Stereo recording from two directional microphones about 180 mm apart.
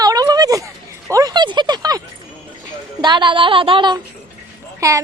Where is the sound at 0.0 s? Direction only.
20° right (ahead or behind).